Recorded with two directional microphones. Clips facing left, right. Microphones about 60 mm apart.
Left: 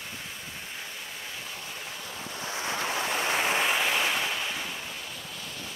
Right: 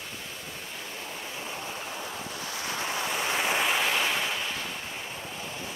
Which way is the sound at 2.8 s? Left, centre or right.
Centre.